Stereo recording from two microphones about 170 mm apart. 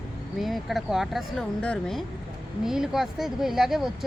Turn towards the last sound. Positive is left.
turn(degrees=0)  # may be behind; listen again after turning